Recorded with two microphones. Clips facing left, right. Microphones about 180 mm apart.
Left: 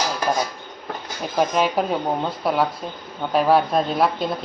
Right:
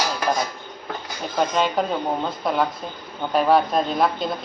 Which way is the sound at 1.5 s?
5° left (ahead or behind).